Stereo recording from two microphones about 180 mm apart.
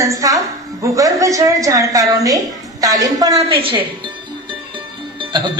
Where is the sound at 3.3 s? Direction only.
35° right (ahead or behind).